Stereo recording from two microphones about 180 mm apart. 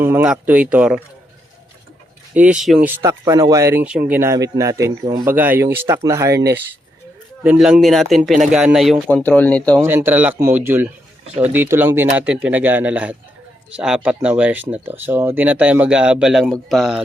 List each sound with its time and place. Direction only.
0.0 s speech: 10° right (ahead or behind)
2.3 s speech: 5° right (ahead or behind)
7.4 s speech: centre (ahead or behind)
9.0 s speech: 10° left (ahead or behind)
9.8 s speech: 10° right (ahead or behind)